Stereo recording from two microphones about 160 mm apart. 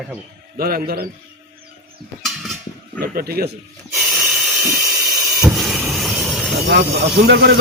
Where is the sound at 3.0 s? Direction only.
70° right (ahead or behind).